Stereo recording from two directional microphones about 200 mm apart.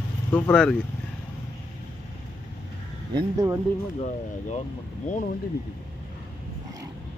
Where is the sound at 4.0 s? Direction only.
35° left (ahead or behind).